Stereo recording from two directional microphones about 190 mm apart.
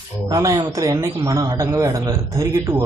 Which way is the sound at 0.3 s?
20° right (ahead or behind).